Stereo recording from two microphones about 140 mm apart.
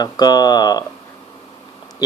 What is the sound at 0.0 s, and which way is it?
Speech, 30° left (ahead or behind).